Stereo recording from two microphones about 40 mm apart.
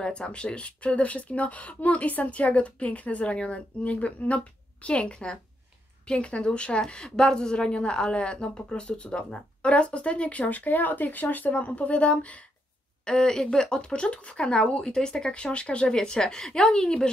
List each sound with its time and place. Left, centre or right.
0.3 s a woman's voice: left
13.0 s a woman's voice: centre
15.3 s a woman's voice: left